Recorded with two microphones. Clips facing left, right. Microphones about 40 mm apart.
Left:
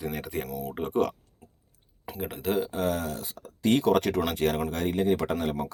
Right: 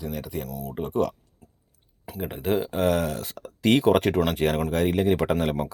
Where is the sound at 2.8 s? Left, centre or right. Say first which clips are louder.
Right 5 dB; right.